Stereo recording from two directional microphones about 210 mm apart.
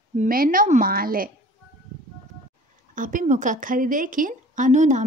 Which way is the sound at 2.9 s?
40° right (ahead or behind).